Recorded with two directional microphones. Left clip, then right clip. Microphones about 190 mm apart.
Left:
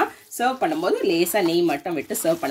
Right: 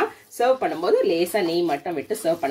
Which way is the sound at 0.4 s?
35° left (ahead or behind).